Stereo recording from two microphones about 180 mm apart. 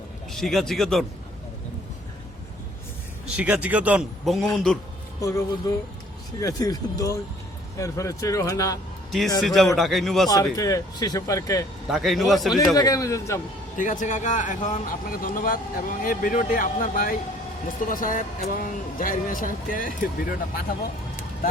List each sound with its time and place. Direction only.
0.3 s a man's voice: centre (ahead or behind)
3.2 s a man's voice: 10° right (ahead or behind)
5.2 s speech: 15° left (ahead or behind)
9.4 s a man's voice: centre (ahead or behind)
10.2 s speech: 20° left (ahead or behind)
11.9 s a man's voice: centre (ahead or behind)
12.7 s speech: 20° left (ahead or behind)
13.7 s a man's voice: 45° left (ahead or behind)